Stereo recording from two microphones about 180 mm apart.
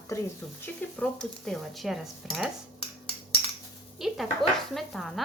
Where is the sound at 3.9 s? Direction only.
Centre (ahead or behind).